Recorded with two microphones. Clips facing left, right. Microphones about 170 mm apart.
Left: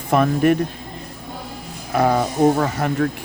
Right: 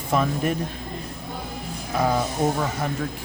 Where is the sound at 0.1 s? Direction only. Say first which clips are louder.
Left 7 dB; 65° left (ahead or behind).